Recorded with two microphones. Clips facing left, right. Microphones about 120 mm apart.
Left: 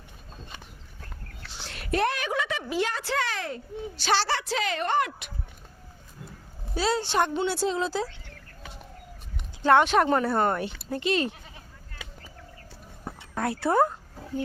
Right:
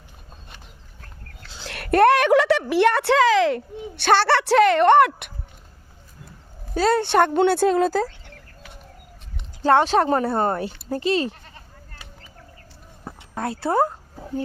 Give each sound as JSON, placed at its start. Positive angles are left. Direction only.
{"t": 1.6, "sound": "a woman's voice", "side_deg": -65}
{"t": 6.7, "sound": "speech", "side_deg": -55}
{"t": 9.6, "sound": "speech", "side_deg": -35}
{"t": 13.3, "sound": "speech", "side_deg": -25}